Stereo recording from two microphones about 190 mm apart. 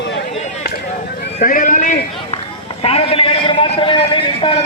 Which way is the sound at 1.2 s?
45° left (ahead or behind).